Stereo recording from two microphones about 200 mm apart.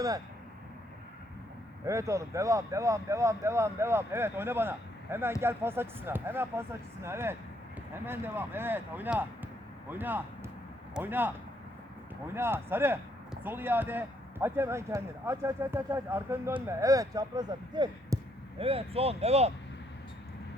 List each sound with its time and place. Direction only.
1.8 s speech: 15° right (ahead or behind); by 19.5 s 30° right (ahead or behind)